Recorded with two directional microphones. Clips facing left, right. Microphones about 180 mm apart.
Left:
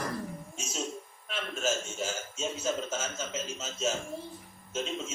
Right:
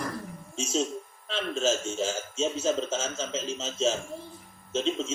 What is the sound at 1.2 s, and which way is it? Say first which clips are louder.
A man's voice: right 5 dB; 25° right (ahead or behind).